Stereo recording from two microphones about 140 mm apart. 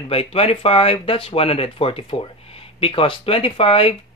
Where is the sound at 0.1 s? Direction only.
45° left (ahead or behind).